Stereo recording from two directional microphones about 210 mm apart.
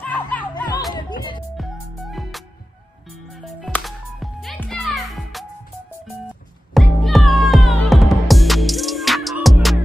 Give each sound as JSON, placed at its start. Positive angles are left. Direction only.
{"t": 0.0, "sound": "music", "side_deg": 5}
{"t": 0.9, "sound": "music", "side_deg": 20}
{"t": 1.6, "sound": "music", "side_deg": 0}
{"t": 6.7, "sound": "music", "side_deg": 0}